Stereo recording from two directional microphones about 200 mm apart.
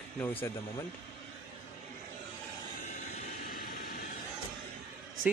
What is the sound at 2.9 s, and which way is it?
Vehicle, 40° left (ahead or behind).